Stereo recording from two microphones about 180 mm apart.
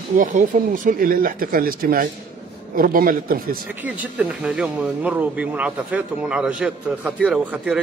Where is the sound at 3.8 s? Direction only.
5° right (ahead or behind).